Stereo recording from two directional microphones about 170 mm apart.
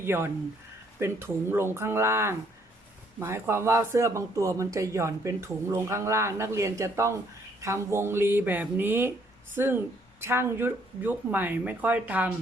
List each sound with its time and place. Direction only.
0.0 s speech: 15° right (ahead or behind)